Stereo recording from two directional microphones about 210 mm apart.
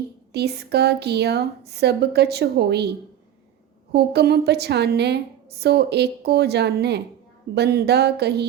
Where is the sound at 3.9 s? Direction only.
50° right (ahead or behind).